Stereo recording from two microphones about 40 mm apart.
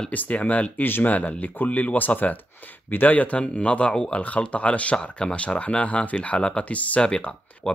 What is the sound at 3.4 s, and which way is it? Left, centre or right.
Speech, left.